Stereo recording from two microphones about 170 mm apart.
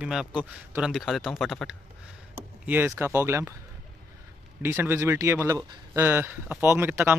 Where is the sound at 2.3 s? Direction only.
10° right (ahead or behind).